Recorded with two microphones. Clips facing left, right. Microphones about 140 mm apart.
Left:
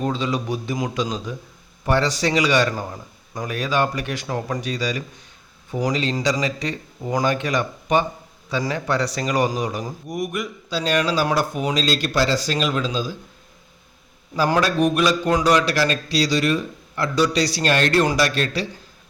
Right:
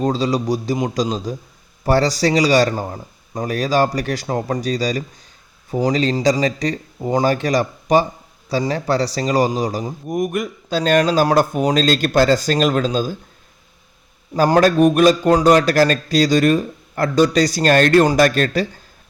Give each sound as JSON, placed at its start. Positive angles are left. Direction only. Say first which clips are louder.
{"t": 0.0, "sound": "a man's voice", "louder": "right 5 dB", "side_deg": -40}
{"t": 10.1, "sound": "a man's voice", "louder": "right 6 dB", "side_deg": -50}
{"t": 14.3, "sound": "a man's voice", "louder": "right 6 dB", "side_deg": -40}